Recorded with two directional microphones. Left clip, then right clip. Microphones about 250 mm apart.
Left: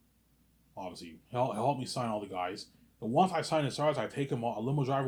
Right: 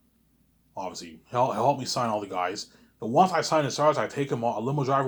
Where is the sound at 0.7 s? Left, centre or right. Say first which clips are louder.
Right 8 dB; centre.